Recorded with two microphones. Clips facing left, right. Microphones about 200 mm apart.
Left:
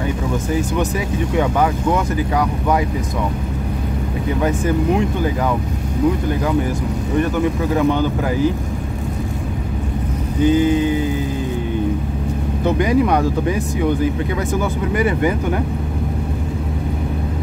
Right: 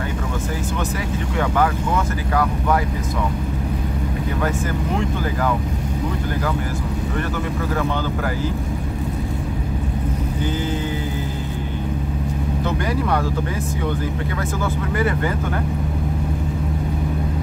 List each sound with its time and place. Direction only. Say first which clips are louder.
4.4 s speech: left 7 dB; 15° left (ahead or behind)
10.4 s speech: left 11 dB; 15° left (ahead or behind)
12.6 s speech: left 8 dB; 15° left (ahead or behind)
14.6 s speech: left 1 dB; 15° left (ahead or behind)